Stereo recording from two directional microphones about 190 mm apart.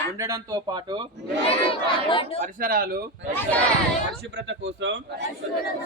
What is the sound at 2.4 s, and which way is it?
Speech, 50° right (ahead or behind).